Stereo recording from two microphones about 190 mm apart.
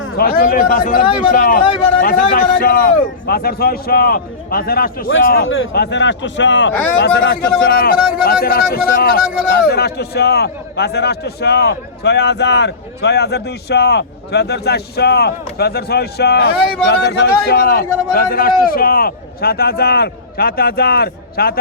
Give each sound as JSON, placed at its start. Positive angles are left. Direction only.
{"t": 0.2, "sound": "a man's voice", "side_deg": 50}
{"t": 5.0, "sound": "a man's voice", "side_deg": 90}
{"t": 5.7, "sound": "speech", "side_deg": 65}
{"t": 7.0, "sound": "a man's voice", "side_deg": 60}